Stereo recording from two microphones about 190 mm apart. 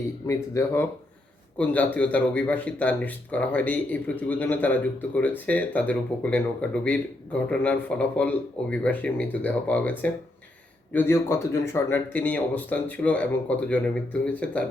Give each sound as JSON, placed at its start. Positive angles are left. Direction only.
{"t": 0.3, "sound": "speech", "side_deg": 15}
{"t": 10.9, "sound": "speech", "side_deg": 10}